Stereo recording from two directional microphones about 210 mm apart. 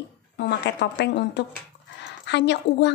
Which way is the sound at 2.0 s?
55° left (ahead or behind).